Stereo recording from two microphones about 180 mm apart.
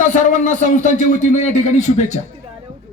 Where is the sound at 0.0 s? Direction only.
45° left (ahead or behind).